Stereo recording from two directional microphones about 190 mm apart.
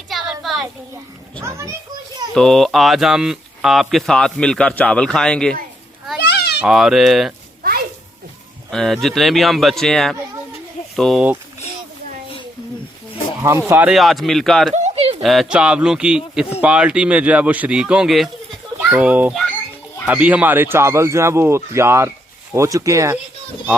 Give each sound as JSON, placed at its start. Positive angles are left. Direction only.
{"t": 0.1, "sound": "a sound", "side_deg": 0}
{"t": 1.4, "sound": "speech", "side_deg": -15}
{"t": 2.3, "sound": "speech", "side_deg": 0}
{"t": 6.1, "sound": "children playing", "side_deg": 60}
{"t": 6.6, "sound": "speech", "side_deg": 0}
{"t": 7.6, "sound": "a sound", "side_deg": -50}
{"t": 8.7, "sound": "speech", "side_deg": 0}
{"t": 13.4, "sound": "speech", "side_deg": -15}
{"t": 14.8, "sound": "a sound", "side_deg": -35}
{"t": 15.2, "sound": "speech", "side_deg": 0}